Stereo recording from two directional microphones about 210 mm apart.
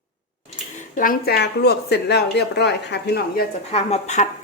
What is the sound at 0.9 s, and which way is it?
Speech, 45° left (ahead or behind).